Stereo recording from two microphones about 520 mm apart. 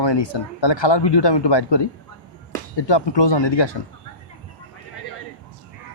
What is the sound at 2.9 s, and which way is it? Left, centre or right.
Speech, left.